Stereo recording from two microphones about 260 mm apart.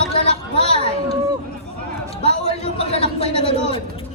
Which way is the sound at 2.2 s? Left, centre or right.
Left.